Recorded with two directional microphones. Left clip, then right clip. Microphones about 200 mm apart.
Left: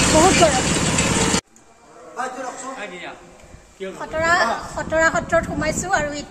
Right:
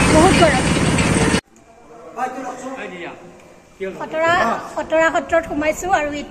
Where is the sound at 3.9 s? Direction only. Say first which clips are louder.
Right 1 dB; 10° left (ahead or behind).